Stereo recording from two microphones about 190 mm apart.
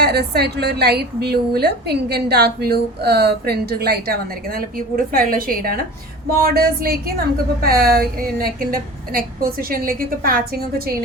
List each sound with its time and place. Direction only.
0.0 s a woman's voice: 60° right (ahead or behind)